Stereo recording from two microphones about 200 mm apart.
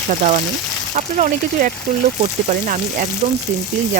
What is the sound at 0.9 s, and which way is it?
Stir, 35° right (ahead or behind).